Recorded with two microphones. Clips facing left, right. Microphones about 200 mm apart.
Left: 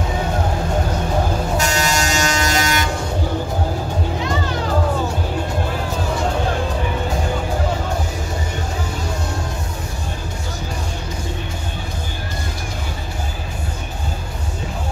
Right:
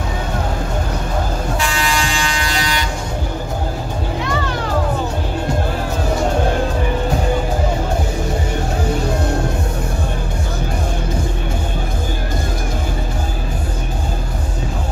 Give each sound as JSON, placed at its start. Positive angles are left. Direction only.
{"t": 1.6, "sound": "vehicle", "side_deg": 45}